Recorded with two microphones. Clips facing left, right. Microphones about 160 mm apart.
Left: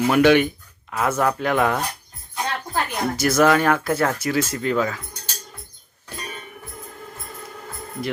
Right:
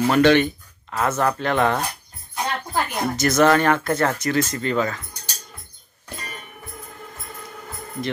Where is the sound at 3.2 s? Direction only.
10° left (ahead or behind).